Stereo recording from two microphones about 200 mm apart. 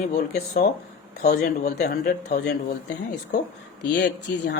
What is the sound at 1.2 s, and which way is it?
Speech, 40° left (ahead or behind).